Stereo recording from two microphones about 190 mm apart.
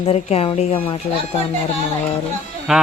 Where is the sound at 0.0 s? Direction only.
30° left (ahead or behind).